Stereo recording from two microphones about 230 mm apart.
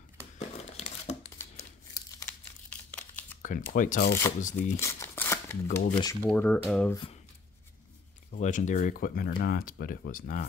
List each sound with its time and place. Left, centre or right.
0.4 s crumpling: left
2.7 s computer keyboard: centre
3.4 s speech: left
4.7 s shuffling cards: centre
5.9 s speech: centre
6.3 s speech: centre
8.4 s speech: left